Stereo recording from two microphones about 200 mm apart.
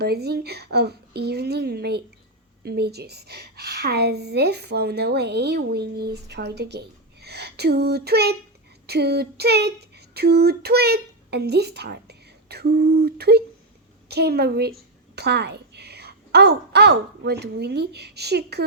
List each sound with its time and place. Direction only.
0.0 s a woman's voice: 55° right (ahead or behind)